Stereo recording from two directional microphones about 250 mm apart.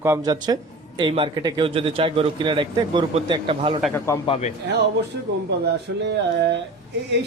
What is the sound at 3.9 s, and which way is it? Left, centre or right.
Speech, centre.